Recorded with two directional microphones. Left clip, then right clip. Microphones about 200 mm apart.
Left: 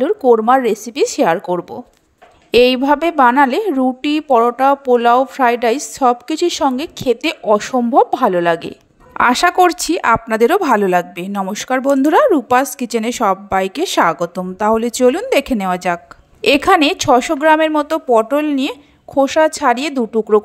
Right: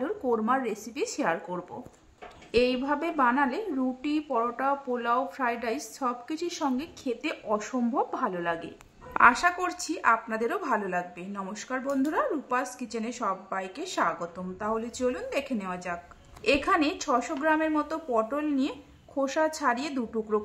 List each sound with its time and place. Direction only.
0.0 s a woman's voice: 40° left (ahead or behind)